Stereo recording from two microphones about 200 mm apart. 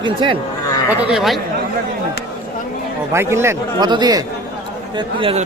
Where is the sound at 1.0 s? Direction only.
Centre (ahead or behind).